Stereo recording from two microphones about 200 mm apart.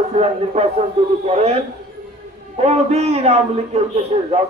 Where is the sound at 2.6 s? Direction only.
30° right (ahead or behind).